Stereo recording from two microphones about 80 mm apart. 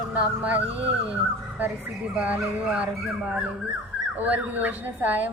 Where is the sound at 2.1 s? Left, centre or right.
Centre.